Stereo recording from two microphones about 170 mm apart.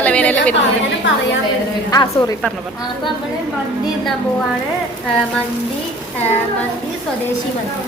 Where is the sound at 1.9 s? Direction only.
20° left (ahead or behind).